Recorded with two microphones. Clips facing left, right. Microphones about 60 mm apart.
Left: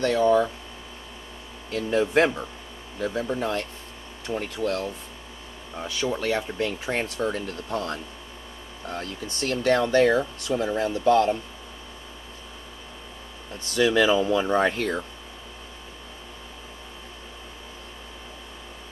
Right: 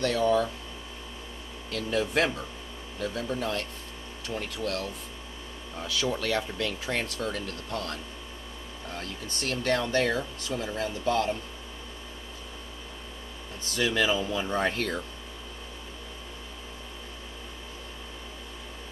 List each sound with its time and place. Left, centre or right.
0.0 s speech: left
1.7 s speech: left
13.7 s speech: left